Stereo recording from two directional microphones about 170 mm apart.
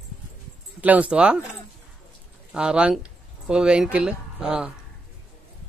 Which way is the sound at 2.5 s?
5° right (ahead or behind).